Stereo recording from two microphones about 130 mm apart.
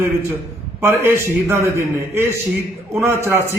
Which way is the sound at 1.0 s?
20° right (ahead or behind).